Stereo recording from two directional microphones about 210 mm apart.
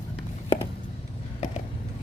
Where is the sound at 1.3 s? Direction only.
35° left (ahead or behind).